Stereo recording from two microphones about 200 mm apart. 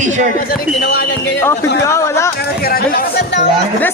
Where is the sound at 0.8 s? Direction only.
50° left (ahead or behind).